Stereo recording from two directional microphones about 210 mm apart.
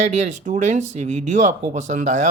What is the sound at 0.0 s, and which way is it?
Speech, 35° right (ahead or behind).